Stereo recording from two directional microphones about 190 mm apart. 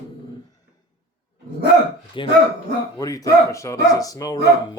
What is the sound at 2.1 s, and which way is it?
Speech, 25° left (ahead or behind).